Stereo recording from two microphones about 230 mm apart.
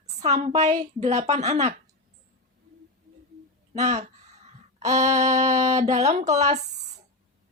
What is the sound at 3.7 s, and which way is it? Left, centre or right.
Speech, right.